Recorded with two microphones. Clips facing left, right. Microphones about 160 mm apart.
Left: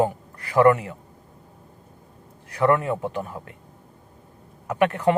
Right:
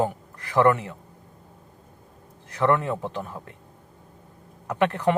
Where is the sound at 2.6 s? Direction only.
5° left (ahead or behind).